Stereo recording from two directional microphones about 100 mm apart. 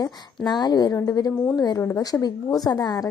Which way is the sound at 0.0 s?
45° left (ahead or behind).